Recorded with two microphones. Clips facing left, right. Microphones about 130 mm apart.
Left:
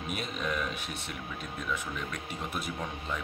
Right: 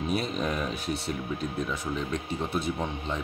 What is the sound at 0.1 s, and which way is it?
A man's voice, 35° right (ahead or behind).